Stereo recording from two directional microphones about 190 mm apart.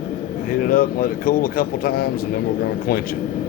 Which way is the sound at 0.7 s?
50° left (ahead or behind).